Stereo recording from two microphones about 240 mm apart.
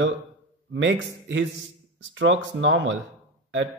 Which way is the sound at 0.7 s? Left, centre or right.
Right.